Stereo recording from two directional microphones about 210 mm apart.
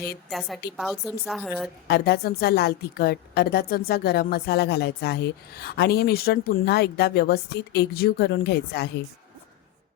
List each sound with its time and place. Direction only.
0.3 s a woman's voice: centre (ahead or behind)
1.9 s a woman's voice: 50° left (ahead or behind)